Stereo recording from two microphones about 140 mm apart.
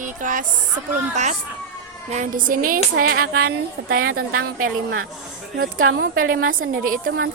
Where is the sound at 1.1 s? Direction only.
55° right (ahead or behind); by 3.4 s 90° right.